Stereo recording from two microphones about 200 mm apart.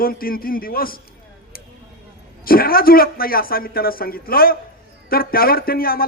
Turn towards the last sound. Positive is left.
turn(degrees=50)  # may be behind; listen again after turning